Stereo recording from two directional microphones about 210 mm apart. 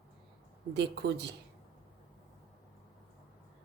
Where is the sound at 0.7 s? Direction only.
55° right (ahead or behind).